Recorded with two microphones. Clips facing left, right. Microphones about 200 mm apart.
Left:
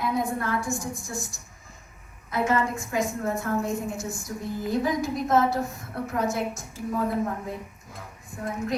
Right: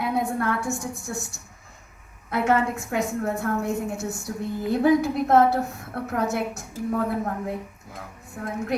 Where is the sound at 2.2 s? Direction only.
65° right (ahead or behind).